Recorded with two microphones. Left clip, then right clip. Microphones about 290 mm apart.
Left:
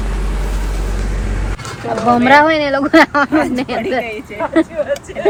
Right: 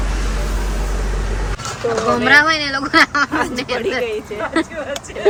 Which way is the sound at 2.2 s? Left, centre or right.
Centre.